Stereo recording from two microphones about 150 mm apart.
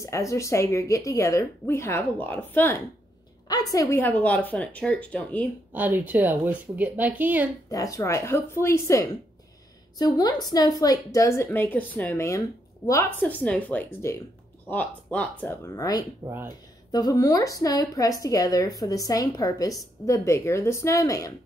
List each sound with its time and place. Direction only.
0.0 s a woman's voice: 20° left (ahead or behind)
3.4 s speech: 25° left (ahead or behind); by 5.5 s 10° left (ahead or behind)
5.7 s speech: 10° right (ahead or behind)
7.7 s a woman's voice: 20° left (ahead or behind)
13.2 s speech: 10° left (ahead or behind)
15.7 s a woman's voice: 25° left (ahead or behind)